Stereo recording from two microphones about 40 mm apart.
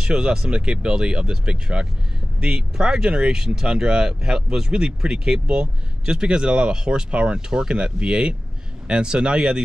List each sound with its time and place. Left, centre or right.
0.0 s speech: right